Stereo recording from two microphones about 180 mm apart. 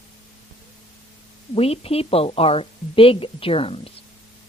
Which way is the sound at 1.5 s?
35° left (ahead or behind).